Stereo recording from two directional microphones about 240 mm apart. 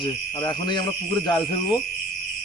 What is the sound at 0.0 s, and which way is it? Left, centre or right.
Speech, centre.